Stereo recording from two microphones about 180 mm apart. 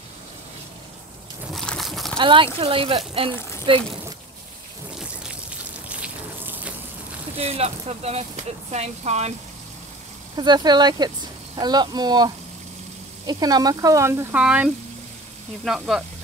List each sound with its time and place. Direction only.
1.5 s a sound: centre (ahead or behind)
2.1 s speech: 30° right (ahead or behind)
5.9 s a sound: 5° right (ahead or behind)
7.3 s speech: 35° right (ahead or behind)
10.3 s speech: 25° right (ahead or behind)
13.3 s speech: 20° right (ahead or behind); by 16.0 s centre (ahead or behind)